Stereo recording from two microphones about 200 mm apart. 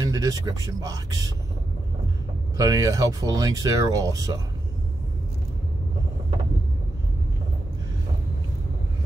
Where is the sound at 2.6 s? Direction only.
20° right (ahead or behind).